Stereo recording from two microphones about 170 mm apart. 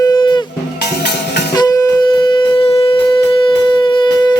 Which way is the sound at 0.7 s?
80° left.